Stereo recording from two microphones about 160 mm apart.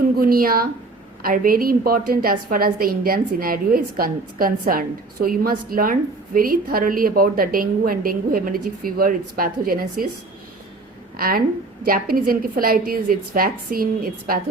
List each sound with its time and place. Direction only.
0.2 s a woman's voice: 65° right (ahead or behind)
11.2 s a woman's voice: 65° right (ahead or behind)